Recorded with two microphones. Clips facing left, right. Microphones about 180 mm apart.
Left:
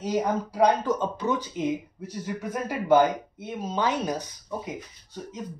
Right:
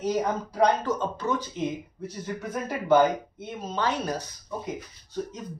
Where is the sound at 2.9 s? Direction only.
10° left (ahead or behind).